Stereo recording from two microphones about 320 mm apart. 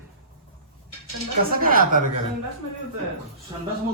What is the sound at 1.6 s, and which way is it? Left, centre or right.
Speech, right.